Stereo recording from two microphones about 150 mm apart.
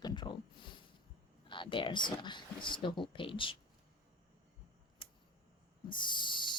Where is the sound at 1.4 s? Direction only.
30° left (ahead or behind).